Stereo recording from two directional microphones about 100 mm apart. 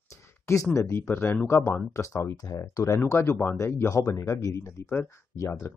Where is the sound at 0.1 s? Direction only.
30° left (ahead or behind).